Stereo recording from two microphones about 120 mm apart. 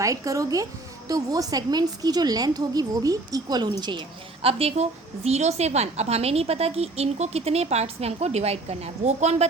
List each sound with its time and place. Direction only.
0.0 s speech: 25° right (ahead or behind)
4.4 s a woman's voice: 55° right (ahead or behind)